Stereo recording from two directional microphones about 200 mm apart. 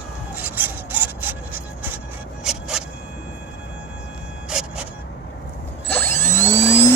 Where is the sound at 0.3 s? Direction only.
10° right (ahead or behind).